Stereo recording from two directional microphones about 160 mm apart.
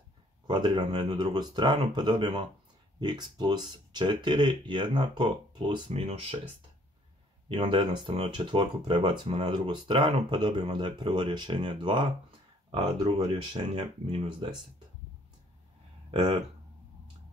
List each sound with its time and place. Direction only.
0.5 s speech: 30° right (ahead or behind)
5.9 s speech: 40° right (ahead or behind)
7.4 s speech: 30° right (ahead or behind)
16.1 s speech: 30° right (ahead or behind)